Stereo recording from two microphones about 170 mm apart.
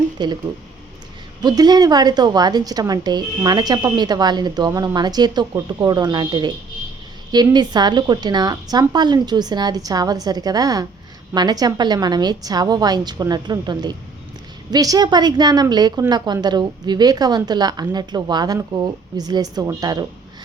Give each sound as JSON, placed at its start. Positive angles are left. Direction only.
{"t": 0.2, "sound": "a woman's voice", "side_deg": -25}
{"t": 1.4, "sound": "a woman's voice", "side_deg": -25}